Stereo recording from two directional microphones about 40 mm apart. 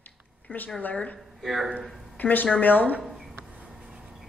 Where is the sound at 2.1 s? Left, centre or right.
Left.